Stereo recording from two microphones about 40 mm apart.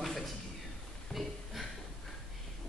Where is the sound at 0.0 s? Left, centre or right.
Centre.